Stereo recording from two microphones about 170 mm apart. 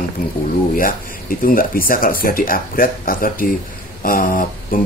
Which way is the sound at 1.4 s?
55° left (ahead or behind).